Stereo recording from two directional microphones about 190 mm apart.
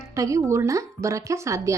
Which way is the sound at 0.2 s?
15° right (ahead or behind).